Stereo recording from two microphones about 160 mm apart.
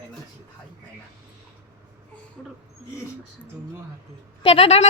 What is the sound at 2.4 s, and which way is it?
Speech, 5° left (ahead or behind).